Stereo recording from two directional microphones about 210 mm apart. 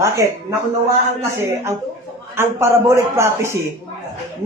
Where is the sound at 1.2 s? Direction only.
15° right (ahead or behind).